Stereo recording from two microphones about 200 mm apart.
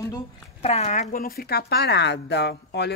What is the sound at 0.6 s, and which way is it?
Speech, 35° left (ahead or behind).